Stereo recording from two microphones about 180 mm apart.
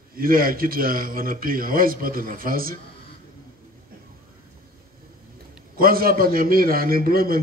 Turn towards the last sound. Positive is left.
turn(degrees=-55)  # may be behind; listen again after turning